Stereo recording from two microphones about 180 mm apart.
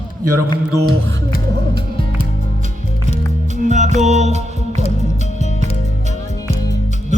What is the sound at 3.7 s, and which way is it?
Music, 40° right (ahead or behind).